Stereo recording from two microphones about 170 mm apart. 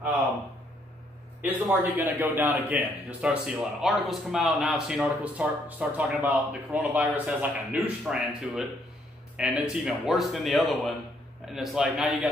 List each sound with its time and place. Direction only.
1.4 s speech: 10° right (ahead or behind)